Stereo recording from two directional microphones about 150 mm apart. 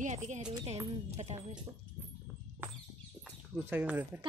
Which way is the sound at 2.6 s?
15° right (ahead or behind).